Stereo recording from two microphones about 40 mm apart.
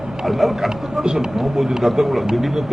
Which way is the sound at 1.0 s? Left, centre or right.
Centre.